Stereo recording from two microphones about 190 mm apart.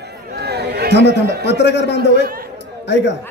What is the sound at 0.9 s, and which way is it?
A man's voice, 65° left (ahead or behind).